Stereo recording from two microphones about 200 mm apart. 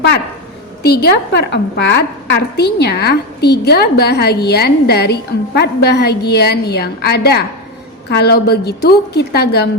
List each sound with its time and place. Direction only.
0.8 s a woman's voice: 55° left (ahead or behind)